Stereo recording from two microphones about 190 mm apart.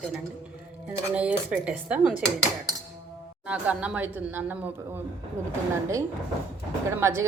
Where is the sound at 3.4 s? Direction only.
5° right (ahead or behind).